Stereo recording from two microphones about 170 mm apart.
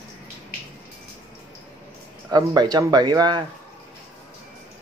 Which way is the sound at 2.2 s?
25° right (ahead or behind).